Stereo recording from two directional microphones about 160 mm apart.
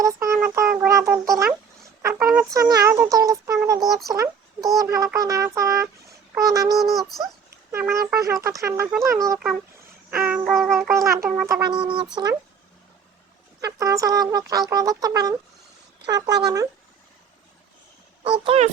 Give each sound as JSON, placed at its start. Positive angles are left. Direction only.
{"t": 0.0, "sound": "child singing", "side_deg": -20}
{"t": 0.9, "sound": "speech", "side_deg": -20}
{"t": 1.8, "sound": "a sound", "side_deg": -15}
{"t": 2.5, "sound": "speech", "side_deg": -20}
{"t": 6.7, "sound": "music", "side_deg": 0}
{"t": 7.7, "sound": "speech", "side_deg": -15}
{"t": 10.1, "sound": "music", "side_deg": -10}
{"t": 11.3, "sound": "speech", "side_deg": -10}
{"t": 11.8, "sound": "speech", "side_deg": -30}
{"t": 13.6, "sound": "speech", "side_deg": -20}
{"t": 18.2, "sound": "speech", "side_deg": -35}